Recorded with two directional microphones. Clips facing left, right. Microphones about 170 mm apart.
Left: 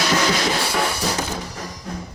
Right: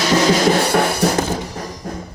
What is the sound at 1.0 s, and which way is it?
Music, 60° right (ahead or behind).